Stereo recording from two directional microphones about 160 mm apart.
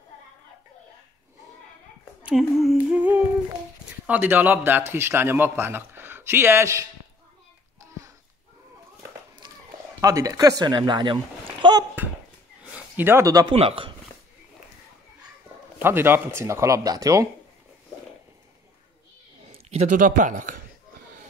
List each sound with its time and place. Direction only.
2.2 s speech: 5° right (ahead or behind)
4.0 s speech: 10° right (ahead or behind)
9.9 s speech: 20° right (ahead or behind)
11.6 s a sound: 30° right (ahead or behind)
12.7 s speech: 15° right (ahead or behind)
13.5 s speech: 35° right (ahead or behind)
15.8 s speech: 15° right (ahead or behind)
19.4 s a sound: 40° right (ahead or behind)
19.9 s speech: 55° right (ahead or behind)